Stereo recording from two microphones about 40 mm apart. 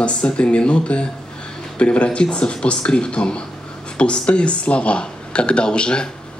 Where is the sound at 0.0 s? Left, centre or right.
Left.